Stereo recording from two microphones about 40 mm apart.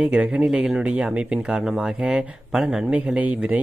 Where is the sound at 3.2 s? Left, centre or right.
Right.